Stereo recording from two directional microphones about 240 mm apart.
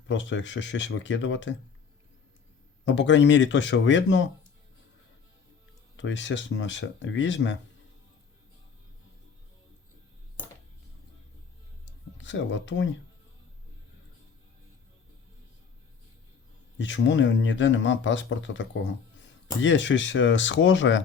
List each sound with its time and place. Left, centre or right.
0.1 s speech: left
2.8 s speech: left
6.0 s speech: left
12.1 s speech: left
16.7 s speech: left